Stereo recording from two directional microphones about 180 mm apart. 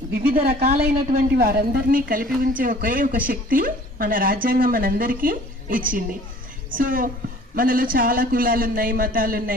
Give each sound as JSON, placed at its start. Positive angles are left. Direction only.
{"t": 0.2, "sound": "a woman's voice", "side_deg": -55}